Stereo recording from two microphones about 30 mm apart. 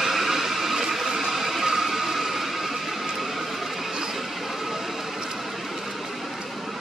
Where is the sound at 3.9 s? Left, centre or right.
Centre.